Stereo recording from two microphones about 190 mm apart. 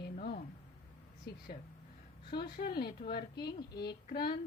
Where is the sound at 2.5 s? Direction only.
55° left (ahead or behind).